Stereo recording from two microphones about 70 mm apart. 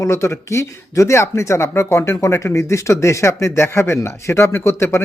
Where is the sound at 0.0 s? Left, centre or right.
Left.